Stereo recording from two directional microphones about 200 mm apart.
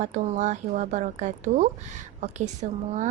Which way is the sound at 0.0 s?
35° right (ahead or behind).